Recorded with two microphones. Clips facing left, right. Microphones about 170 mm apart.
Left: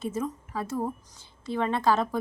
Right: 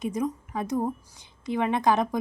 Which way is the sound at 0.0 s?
15° right (ahead or behind).